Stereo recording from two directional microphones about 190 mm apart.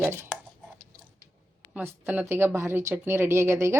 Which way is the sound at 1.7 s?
10° right (ahead or behind).